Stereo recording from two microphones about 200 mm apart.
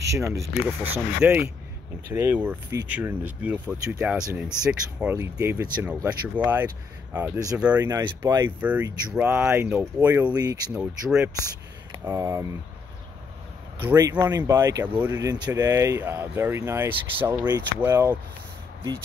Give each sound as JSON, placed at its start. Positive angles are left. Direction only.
{"t": 0.3, "sound": "speech", "side_deg": -10}
{"t": 10.3, "sound": "speech", "side_deg": -20}
{"t": 10.7, "sound": "speech", "side_deg": -5}
{"t": 13.8, "sound": "speech", "side_deg": -20}